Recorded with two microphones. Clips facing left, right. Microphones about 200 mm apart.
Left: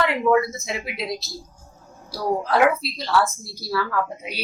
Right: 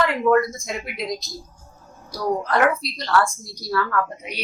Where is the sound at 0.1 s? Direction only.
5° left (ahead or behind).